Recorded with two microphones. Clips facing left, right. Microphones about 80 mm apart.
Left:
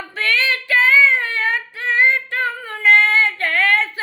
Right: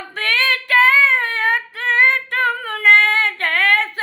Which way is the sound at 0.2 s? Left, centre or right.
Right.